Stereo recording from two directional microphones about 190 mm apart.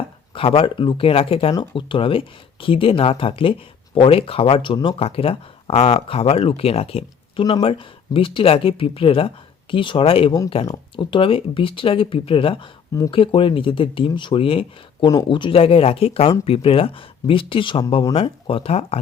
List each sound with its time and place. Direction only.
0.3 s speech: 30° left (ahead or behind)